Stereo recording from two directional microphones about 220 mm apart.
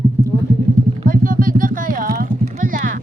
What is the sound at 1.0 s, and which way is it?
Clip-clop, 40° right (ahead or behind).